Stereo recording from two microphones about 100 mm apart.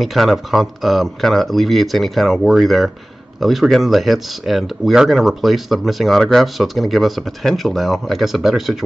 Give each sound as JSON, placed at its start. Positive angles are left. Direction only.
{"t": 0.0, "sound": "speech", "side_deg": 0}